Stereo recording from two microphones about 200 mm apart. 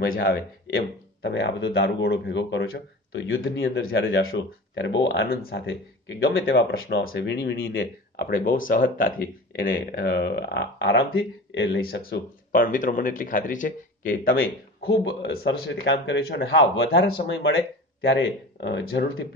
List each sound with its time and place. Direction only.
0.0 s speech: 50° left (ahead or behind); by 3.3 s 65° left (ahead or behind)
3.5 s speech: 55° left (ahead or behind)
6.4 s speech: 55° left (ahead or behind)
14.9 s speech: 65° left (ahead or behind)